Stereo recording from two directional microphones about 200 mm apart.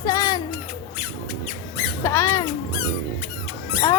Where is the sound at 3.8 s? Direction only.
15° left (ahead or behind).